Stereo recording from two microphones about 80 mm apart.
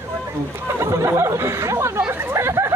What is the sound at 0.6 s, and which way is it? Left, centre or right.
Chatter, right.